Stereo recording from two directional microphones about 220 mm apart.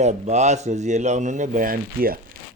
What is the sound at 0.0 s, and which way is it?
Speech, 30° right (ahead or behind).